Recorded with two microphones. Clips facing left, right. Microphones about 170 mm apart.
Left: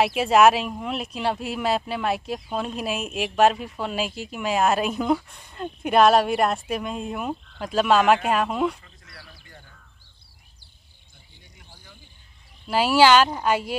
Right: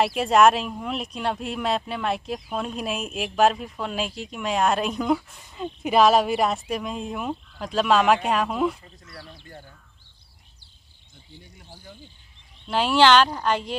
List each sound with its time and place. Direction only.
0.0 s speech: centre (ahead or behind)
8.8 s a sound: 30° right (ahead or behind)
12.6 s a woman's voice: 5° left (ahead or behind)